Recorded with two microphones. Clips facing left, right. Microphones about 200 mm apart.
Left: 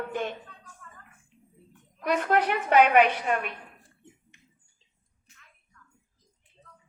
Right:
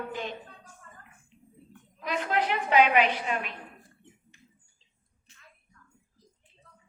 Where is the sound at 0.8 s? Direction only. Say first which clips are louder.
Left 2 dB; 30° right (ahead or behind).